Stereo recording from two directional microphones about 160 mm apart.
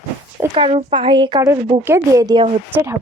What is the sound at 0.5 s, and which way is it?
Speech, 35° right (ahead or behind).